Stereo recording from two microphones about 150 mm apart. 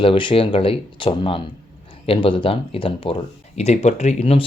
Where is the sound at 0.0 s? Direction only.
35° left (ahead or behind).